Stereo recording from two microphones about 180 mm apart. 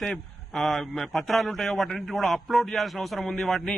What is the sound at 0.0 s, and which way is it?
A man's voice, centre (ahead or behind).